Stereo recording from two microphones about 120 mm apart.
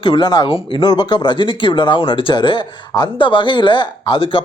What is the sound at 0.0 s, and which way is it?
Speech, 40° left (ahead or behind).